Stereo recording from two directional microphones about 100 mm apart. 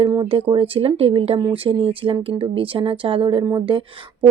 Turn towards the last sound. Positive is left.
turn(degrees=-55)  # may be behind; listen again after turning